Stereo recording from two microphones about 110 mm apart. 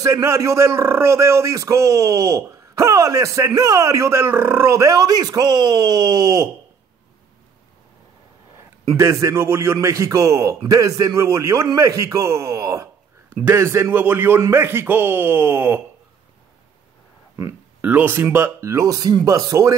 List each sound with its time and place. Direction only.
0.0 s a man's voice: 25° right (ahead or behind)
8.9 s a man's voice: 25° right (ahead or behind)
17.8 s a man's voice: 20° right (ahead or behind)